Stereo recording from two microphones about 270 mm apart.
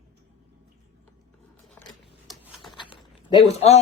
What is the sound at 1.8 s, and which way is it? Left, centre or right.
Scissors, centre.